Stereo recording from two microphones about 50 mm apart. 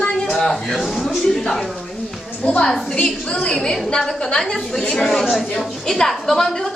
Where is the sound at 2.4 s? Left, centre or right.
Left.